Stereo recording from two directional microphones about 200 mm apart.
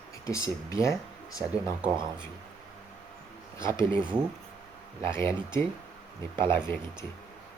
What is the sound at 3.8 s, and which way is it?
Speech, 25° right (ahead or behind).